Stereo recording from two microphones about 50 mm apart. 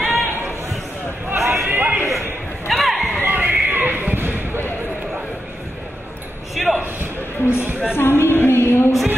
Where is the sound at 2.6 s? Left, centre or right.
Centre.